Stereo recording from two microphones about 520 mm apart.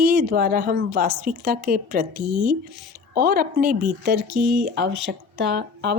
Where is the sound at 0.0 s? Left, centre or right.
Centre.